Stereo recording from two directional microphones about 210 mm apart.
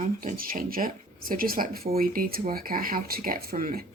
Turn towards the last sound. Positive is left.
turn(degrees=-45)  # may be behind; listen again after turning